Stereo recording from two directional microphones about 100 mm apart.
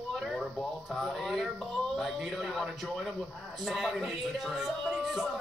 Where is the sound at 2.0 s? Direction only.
Centre (ahead or behind).